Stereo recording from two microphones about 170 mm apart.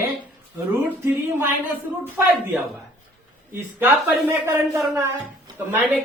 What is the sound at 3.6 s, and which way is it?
Speech, 15° right (ahead or behind).